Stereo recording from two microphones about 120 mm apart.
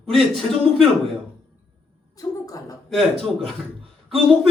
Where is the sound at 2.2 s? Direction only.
30° left (ahead or behind).